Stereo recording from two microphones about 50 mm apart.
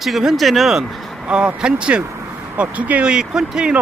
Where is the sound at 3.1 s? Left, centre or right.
Centre.